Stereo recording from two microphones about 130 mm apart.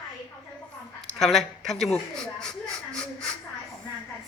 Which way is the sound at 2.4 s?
5° left (ahead or behind).